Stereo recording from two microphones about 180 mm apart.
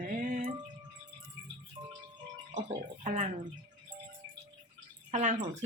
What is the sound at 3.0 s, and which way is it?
Speech, 40° right (ahead or behind).